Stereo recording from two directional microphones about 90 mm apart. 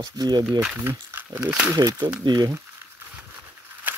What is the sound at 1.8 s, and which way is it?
Speech, 45° right (ahead or behind).